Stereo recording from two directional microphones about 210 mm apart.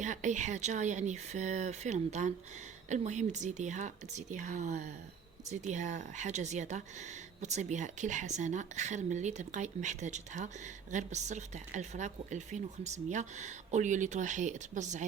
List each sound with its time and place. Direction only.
0.0 s speech: 35° right (ahead or behind)